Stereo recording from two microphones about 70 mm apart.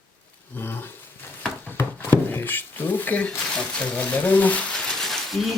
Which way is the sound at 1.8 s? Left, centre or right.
Left.